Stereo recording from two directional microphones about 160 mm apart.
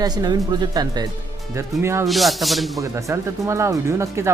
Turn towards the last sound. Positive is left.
turn(degrees=-15)  # may be behind; listen again after turning